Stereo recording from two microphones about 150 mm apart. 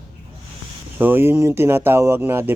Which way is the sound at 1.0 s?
15° right (ahead or behind).